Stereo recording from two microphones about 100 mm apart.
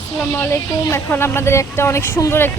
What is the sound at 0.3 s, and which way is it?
Speech, 25° left (ahead or behind).